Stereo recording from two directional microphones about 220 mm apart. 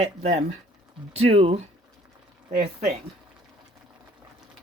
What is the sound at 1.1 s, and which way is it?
Speech, 25° right (ahead or behind).